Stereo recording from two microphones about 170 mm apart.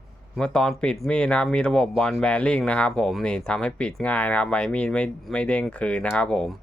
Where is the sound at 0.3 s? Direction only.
5° left (ahead or behind).